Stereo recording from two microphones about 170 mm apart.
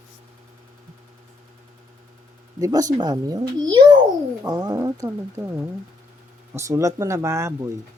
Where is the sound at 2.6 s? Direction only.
20° right (ahead or behind).